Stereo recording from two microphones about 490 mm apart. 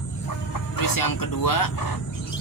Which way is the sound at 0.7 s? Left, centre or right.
Left.